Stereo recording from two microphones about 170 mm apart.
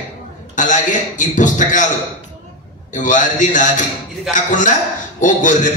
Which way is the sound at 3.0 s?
45° left (ahead or behind).